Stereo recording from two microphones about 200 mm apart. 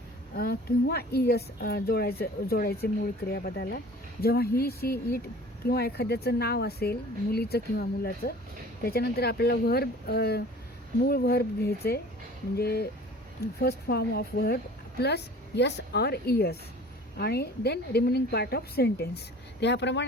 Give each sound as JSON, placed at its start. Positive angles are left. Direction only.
{"t": 0.3, "sound": "a woman's voice", "side_deg": 50}